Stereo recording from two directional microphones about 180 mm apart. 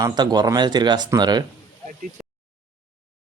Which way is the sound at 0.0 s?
20° right (ahead or behind).